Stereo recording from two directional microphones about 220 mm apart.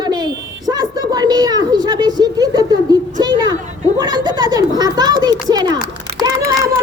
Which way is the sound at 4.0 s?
20° right (ahead or behind).